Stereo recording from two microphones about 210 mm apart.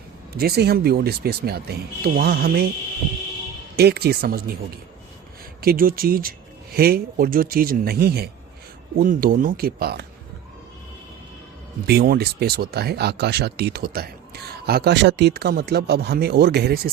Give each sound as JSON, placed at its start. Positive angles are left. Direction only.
{"t": 0.3, "sound": "speech", "side_deg": -50}
{"t": 3.8, "sound": "speech", "side_deg": -50}
{"t": 5.5, "sound": "speech", "side_deg": -45}
{"t": 11.9, "sound": "speech", "side_deg": -50}